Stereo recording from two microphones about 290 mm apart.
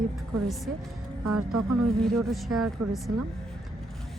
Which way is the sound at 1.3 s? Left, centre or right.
Right.